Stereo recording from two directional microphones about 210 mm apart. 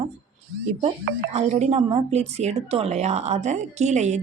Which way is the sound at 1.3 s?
30° right (ahead or behind).